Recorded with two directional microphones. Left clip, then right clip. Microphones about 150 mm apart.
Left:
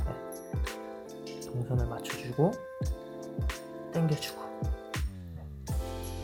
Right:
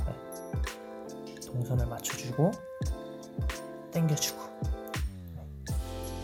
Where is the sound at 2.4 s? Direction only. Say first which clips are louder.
Left 1 dB; 5° right (ahead or behind).